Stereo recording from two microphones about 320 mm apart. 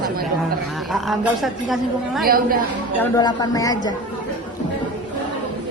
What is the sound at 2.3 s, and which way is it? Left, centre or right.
Speech, right.